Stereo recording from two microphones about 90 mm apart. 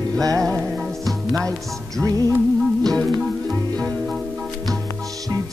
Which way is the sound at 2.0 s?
40° right (ahead or behind).